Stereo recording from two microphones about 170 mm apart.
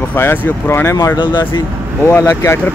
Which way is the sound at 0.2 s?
15° left (ahead or behind).